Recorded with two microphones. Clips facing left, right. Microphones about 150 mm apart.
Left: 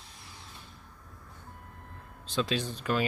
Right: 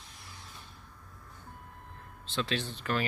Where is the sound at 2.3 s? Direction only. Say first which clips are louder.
Left 3 dB; 15° left (ahead or behind).